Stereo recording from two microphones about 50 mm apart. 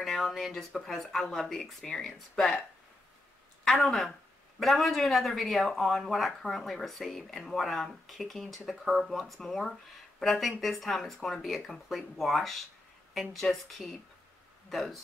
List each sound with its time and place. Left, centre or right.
0.0 s speech: centre
1.9 s speech: centre
2.3 s speech: centre
3.6 s speech: centre